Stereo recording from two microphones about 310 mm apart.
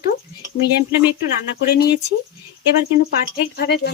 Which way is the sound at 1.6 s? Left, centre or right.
Left.